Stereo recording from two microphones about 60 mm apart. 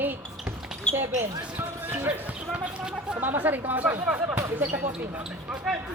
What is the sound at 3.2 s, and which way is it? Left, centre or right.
Speech, right.